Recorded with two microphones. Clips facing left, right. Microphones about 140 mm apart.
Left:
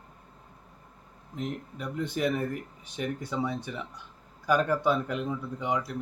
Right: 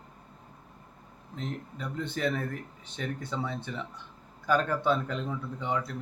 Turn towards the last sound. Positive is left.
turn(degrees=10)  # may be behind; listen again after turning